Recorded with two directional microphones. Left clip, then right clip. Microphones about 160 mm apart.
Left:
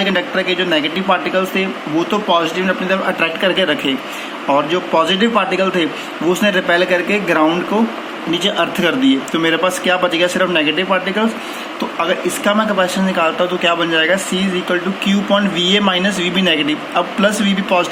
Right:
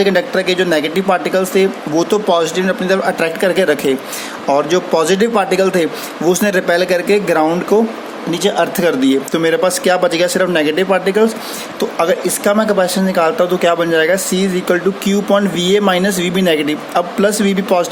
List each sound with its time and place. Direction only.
0.0 s speech: 90° right
12.5 s speech: 90° right